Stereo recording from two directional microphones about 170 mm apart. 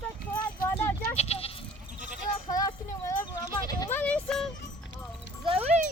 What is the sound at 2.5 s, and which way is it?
Speech, 20° left (ahead or behind).